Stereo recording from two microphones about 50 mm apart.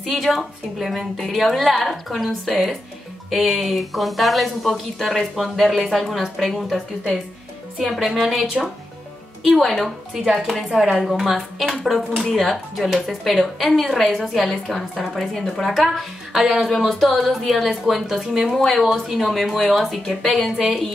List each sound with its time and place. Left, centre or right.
0.0 s speech: centre
7.8 s speech: centre
10.2 s speech: centre
10.5 s speech: centre